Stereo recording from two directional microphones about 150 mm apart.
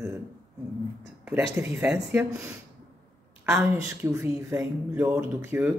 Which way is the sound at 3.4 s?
15° right (ahead or behind).